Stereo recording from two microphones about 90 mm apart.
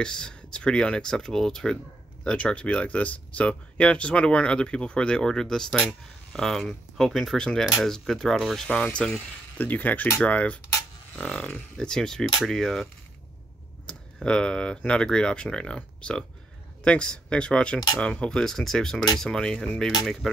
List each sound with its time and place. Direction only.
0.0 s speech: 10° left (ahead or behind)
13.8 s speech: 10° left (ahead or behind)